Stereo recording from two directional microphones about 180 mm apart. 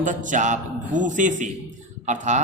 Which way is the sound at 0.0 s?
45° right (ahead or behind).